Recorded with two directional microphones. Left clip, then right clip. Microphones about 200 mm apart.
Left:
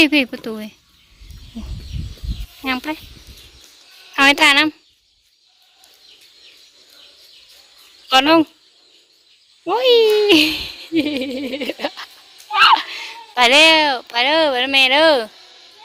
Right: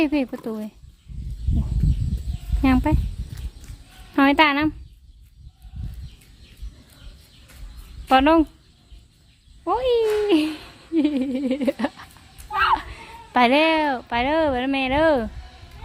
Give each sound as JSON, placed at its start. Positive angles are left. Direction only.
{"t": 0.0, "sound": "speech", "side_deg": 0}
{"t": 2.6, "sound": "speech", "side_deg": 0}
{"t": 4.1, "sound": "speech", "side_deg": 5}
{"t": 8.1, "sound": "a child's voice", "side_deg": 10}
{"t": 9.6, "sound": "a child's voice", "side_deg": 10}